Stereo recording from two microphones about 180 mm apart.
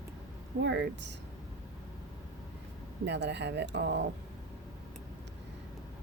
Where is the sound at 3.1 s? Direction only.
70° right (ahead or behind).